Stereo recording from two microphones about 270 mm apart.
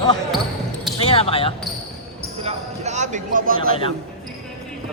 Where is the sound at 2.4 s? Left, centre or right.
Right.